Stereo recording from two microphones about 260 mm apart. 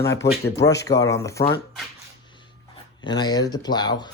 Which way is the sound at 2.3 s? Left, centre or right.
Centre.